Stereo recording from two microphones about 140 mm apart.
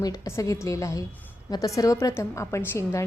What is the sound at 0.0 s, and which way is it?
A woman's voice, 20° left (ahead or behind).